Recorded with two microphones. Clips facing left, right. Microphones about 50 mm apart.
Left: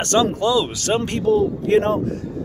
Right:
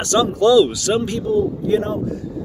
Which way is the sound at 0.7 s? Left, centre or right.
Left.